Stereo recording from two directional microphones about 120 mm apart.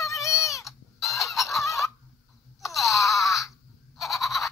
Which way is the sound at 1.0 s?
25° left (ahead or behind).